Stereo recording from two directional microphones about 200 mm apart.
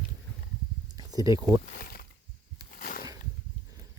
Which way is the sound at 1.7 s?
45° left (ahead or behind).